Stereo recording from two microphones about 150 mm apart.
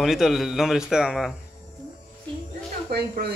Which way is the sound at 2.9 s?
90° right.